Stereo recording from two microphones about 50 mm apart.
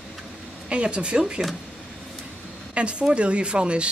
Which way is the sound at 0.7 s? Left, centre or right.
Right.